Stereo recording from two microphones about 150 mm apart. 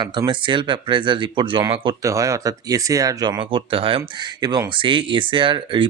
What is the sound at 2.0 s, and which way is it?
Speech, 20° right (ahead or behind).